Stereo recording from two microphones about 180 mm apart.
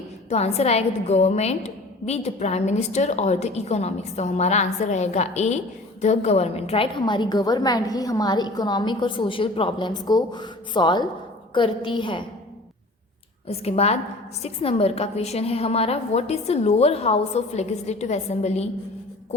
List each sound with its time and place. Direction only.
0.3 s a woman's voice: 35° left (ahead or behind)
13.5 s a woman's voice: 35° left (ahead or behind)